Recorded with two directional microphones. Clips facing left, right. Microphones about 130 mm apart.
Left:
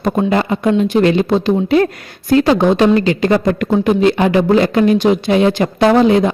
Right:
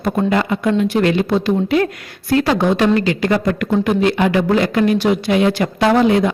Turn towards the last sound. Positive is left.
turn(degrees=25)  # may be behind; listen again after turning